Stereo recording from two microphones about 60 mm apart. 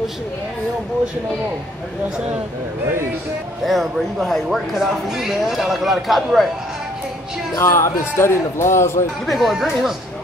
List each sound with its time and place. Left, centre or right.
3.6 s speech: centre
7.5 s a man's voice: left
9.2 s speech: centre